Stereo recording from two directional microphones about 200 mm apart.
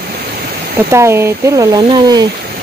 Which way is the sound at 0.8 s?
15° right (ahead or behind).